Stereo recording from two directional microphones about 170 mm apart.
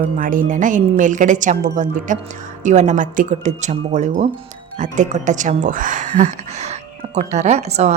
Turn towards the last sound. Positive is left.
turn(degrees=-40)  # may be behind; listen again after turning